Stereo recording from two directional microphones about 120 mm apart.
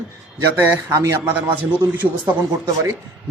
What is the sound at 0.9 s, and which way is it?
Speech, 25° right (ahead or behind).